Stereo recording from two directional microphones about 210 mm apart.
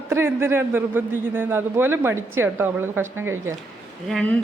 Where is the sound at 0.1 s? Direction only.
10° right (ahead or behind).